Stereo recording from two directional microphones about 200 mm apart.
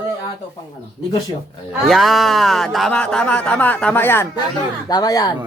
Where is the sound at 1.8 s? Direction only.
Centre (ahead or behind); by 5.3 s 20° left (ahead or behind).